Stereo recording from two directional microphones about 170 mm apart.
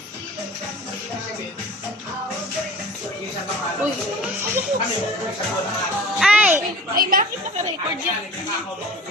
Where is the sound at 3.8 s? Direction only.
10° right (ahead or behind).